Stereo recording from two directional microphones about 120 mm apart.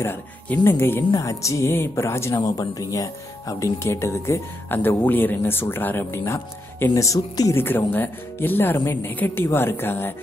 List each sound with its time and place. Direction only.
0.0 s speech: 20° left (ahead or behind)